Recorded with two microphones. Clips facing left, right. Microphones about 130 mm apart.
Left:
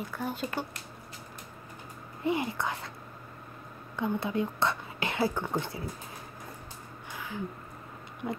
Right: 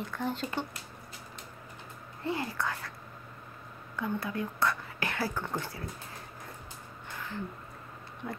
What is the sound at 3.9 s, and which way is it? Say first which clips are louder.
Speech: left 4 dB; 20° left (ahead or behind).